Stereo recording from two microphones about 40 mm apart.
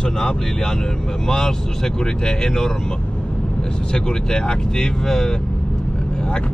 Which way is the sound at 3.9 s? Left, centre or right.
Centre.